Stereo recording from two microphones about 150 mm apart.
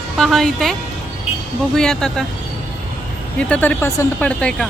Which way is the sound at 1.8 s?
5° left (ahead or behind).